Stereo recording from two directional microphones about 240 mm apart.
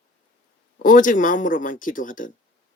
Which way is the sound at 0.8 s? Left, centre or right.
Left.